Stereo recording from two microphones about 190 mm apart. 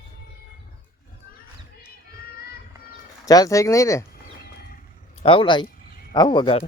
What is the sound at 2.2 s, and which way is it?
Music, 55° left (ahead or behind).